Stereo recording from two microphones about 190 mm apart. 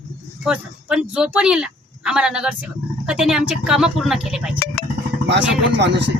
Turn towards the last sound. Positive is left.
turn(degrees=-65)  # may be behind; listen again after turning